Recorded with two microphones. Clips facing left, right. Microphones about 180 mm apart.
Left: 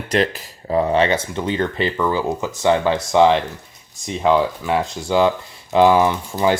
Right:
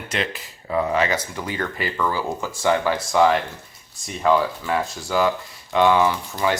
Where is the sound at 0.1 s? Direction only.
35° left (ahead or behind).